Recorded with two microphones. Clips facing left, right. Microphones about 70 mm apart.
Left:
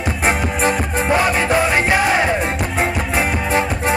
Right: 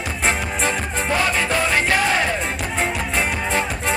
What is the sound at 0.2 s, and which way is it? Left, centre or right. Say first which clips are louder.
Music: left 4 dB; centre.